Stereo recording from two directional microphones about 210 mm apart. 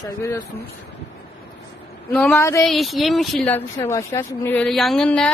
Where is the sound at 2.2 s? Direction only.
5° left (ahead or behind).